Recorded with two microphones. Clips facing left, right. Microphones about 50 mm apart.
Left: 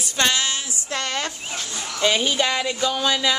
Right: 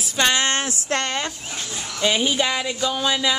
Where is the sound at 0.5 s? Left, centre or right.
Right.